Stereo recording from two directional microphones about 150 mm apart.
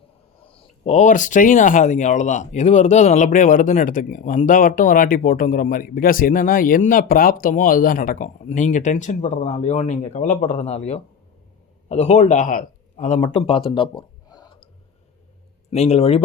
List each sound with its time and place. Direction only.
0.4 s speech: 40° left (ahead or behind); by 8.3 s 65° left (ahead or behind)
8.4 s speech: 55° left (ahead or behind)
10.6 s speech: 45° left (ahead or behind)
13.4 s speech: 35° left (ahead or behind)
15.7 s speech: 45° left (ahead or behind)